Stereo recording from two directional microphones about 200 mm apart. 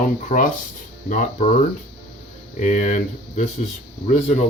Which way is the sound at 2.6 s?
35° left (ahead or behind).